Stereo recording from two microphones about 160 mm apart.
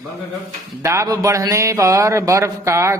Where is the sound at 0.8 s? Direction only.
20° right (ahead or behind).